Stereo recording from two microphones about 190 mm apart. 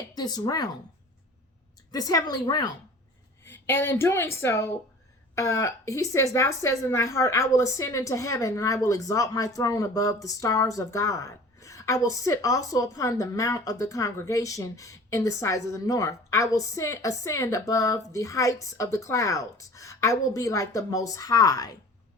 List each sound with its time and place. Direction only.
0.1 s a woman's voice: 20° left (ahead or behind)
1.9 s a woman's voice: 20° left (ahead or behind)